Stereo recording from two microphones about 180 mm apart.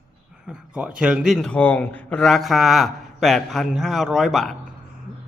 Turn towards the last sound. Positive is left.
turn(degrees=0)  # may be behind; listen again after turning